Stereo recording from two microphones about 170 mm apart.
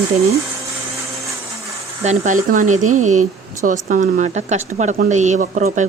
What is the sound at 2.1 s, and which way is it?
Speech, 50° right (ahead or behind).